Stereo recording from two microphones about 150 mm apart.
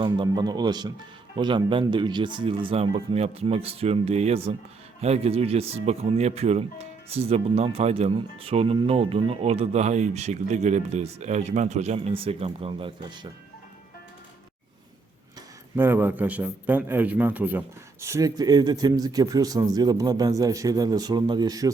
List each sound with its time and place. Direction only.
0.0 s a man's voice: 30° right (ahead or behind)
15.7 s a man's voice: 15° right (ahead or behind)